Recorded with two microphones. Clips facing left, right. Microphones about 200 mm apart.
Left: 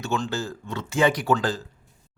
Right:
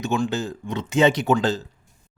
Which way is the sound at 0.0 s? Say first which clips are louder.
Right 4 dB; 15° right (ahead or behind).